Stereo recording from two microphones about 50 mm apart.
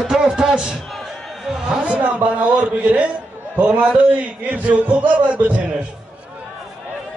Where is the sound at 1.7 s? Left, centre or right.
Right.